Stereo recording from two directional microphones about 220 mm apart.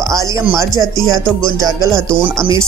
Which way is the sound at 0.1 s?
15° right (ahead or behind).